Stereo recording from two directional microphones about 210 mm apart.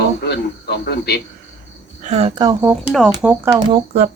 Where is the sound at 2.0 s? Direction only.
30° right (ahead or behind).